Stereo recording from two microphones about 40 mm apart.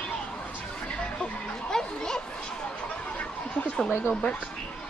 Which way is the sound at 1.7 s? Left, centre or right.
Centre.